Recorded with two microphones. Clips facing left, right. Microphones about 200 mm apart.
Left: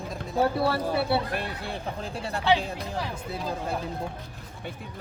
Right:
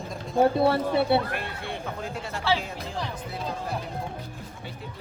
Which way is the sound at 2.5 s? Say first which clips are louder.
Left 3 dB; 15° left (ahead or behind).